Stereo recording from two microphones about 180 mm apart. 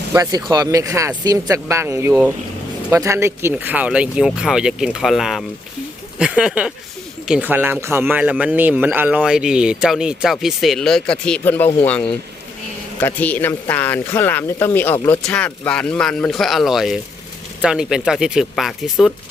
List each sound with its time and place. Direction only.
0.1 s speech: 20° right (ahead or behind); by 19.1 s centre (ahead or behind)